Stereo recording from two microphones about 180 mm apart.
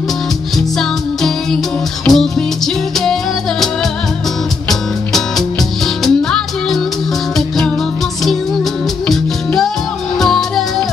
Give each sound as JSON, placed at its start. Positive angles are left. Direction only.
{"t": 0.6, "sound": "music", "side_deg": 0}
{"t": 4.6, "sound": "music", "side_deg": 0}
{"t": 9.0, "sound": "music", "side_deg": 5}